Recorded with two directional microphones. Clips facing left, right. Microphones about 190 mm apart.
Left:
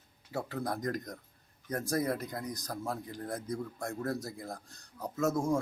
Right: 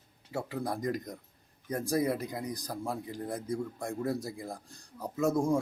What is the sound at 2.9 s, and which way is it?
Speech, 10° right (ahead or behind).